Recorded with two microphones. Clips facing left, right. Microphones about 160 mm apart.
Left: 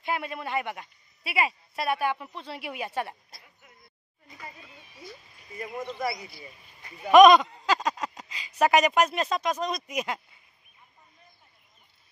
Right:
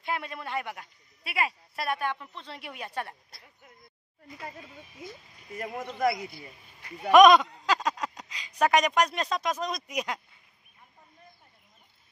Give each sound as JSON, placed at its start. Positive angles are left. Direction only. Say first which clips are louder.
{"t": 0.0, "sound": "speech", "louder": "left 3 dB", "side_deg": 5}
{"t": 5.6, "sound": "speech", "louder": "right 3 dB", "side_deg": -60}
{"t": 7.1, "sound": "speech", "louder": "left 2 dB", "side_deg": 0}